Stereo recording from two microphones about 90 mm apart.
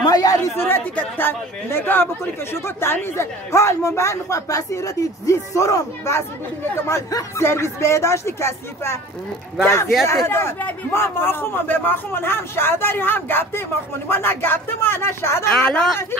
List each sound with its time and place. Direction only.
0.0 s chatter: 45° left (ahead or behind)
0.6 s a woman's voice: 25° left (ahead or behind)
7.1 s a woman's voice: 40° left (ahead or behind)
7.4 s a woman's voice: 30° left (ahead or behind)
10.0 s speech: 30° left (ahead or behind)
15.5 s a woman's voice: 10° left (ahead or behind)